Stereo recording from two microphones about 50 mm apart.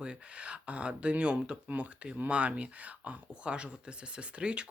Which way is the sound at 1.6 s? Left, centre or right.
Right.